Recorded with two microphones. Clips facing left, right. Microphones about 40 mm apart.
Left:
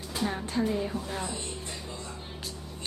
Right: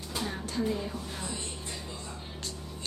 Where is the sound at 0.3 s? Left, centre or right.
Centre.